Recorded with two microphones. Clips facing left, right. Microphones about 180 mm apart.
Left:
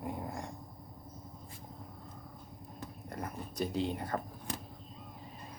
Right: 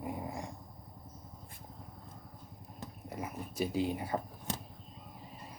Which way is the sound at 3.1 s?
5° right (ahead or behind).